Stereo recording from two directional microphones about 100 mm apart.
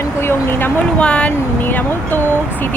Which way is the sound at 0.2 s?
25° left (ahead or behind).